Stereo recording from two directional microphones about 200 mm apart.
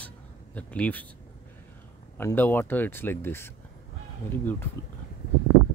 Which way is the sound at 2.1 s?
10° left (ahead or behind).